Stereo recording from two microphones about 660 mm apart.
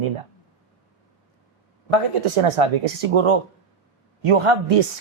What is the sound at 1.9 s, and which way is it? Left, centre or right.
Speech, right.